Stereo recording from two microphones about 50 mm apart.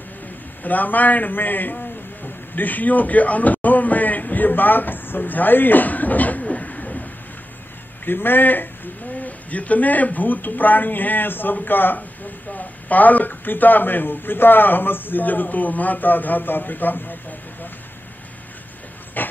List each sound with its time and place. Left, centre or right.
0.7 s a man's voice: left
8.0 s a man's voice: left
9.2 s a man's voice: left
19.2 s hiss: left